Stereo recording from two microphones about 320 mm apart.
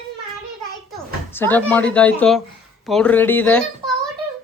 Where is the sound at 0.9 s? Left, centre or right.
Centre.